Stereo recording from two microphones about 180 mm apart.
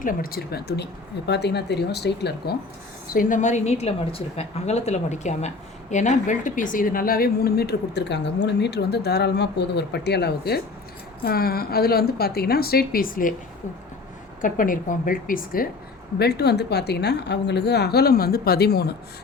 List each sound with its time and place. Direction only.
0.0 s a woman's voice: 50° left (ahead or behind)
3.1 s a woman's voice: 50° left (ahead or behind)
14.4 s a woman's voice: 50° left (ahead or behind)
16.1 s a woman's voice: 65° left (ahead or behind)